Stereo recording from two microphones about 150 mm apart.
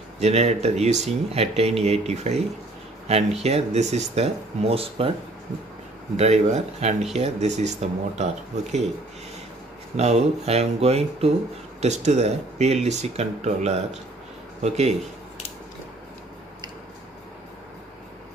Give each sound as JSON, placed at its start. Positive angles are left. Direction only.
{"t": 0.2, "sound": "speech", "side_deg": -45}
{"t": 6.1, "sound": "speech", "side_deg": -45}
{"t": 9.9, "sound": "speech", "side_deg": -45}